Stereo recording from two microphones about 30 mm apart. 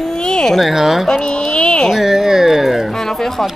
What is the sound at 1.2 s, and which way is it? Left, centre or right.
Speech, left.